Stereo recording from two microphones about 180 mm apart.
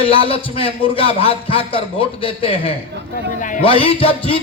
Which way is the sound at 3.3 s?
45° left (ahead or behind).